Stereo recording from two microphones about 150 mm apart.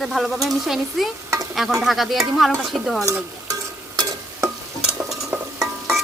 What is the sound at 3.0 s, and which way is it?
Stir, 20° right (ahead or behind).